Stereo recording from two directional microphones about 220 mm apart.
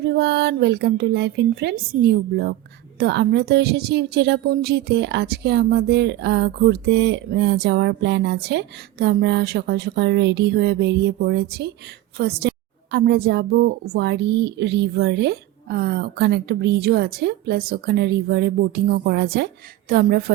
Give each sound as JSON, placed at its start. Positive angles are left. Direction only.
{"t": 0.0, "sound": "speech", "side_deg": -50}